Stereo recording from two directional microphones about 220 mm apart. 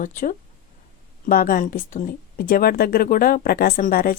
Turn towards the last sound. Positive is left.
turn(degrees=40)  # may be behind; listen again after turning